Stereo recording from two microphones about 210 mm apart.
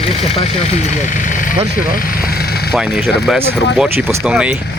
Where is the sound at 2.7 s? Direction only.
Centre (ahead or behind).